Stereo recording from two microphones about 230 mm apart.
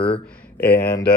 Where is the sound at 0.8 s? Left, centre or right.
Left.